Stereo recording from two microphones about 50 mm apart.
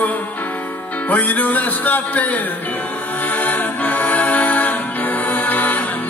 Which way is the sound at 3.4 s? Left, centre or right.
Left.